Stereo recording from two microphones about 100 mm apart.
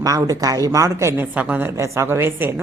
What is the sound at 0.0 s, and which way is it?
A woman's voice, 35° right (ahead or behind).